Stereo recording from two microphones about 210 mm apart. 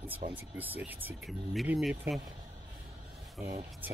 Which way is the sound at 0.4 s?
10° right (ahead or behind).